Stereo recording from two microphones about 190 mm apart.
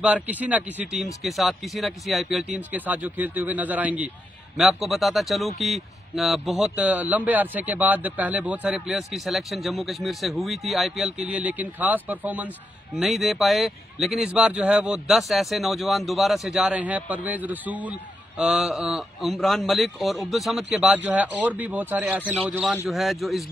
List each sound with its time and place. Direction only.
0.0 s a man's voice: 5° right (ahead or behind)